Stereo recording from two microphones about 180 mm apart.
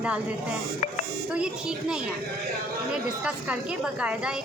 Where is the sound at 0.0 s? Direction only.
5° right (ahead or behind).